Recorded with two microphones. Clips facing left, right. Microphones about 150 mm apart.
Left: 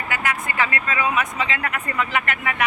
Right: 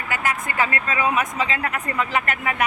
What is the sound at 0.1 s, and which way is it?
Speech, 45° right (ahead or behind).